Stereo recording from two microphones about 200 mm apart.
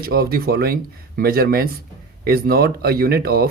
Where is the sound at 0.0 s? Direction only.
50° right (ahead or behind).